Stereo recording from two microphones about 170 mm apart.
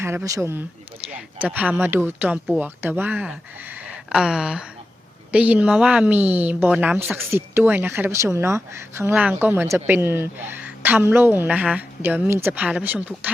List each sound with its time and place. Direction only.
0.0 s a woman's voice: 15° right (ahead or behind)